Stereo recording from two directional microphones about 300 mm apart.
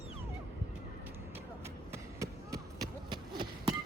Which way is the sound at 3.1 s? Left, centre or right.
Centre.